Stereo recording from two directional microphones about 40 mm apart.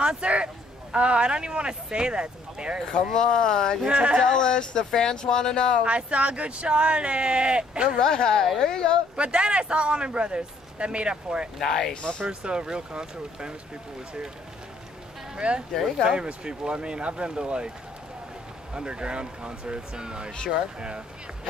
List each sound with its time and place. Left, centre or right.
0.0 s speech: right
3.1 s speech: centre
3.8 s speech: right
4.3 s speech: centre
5.9 s speech: right
8.0 s speech: centre
9.1 s speech: right
11.6 s speech: centre
11.9 s speech: left
12.3 s speech: right
15.3 s speech: right
18.7 s speech: right